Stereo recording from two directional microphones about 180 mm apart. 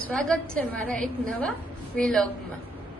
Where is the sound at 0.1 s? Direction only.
5° left (ahead or behind).